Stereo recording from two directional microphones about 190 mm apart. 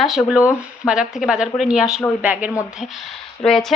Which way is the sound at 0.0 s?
Centre (ahead or behind).